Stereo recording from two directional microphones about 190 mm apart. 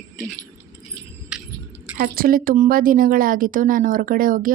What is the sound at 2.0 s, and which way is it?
A woman's voice, 50° right (ahead or behind).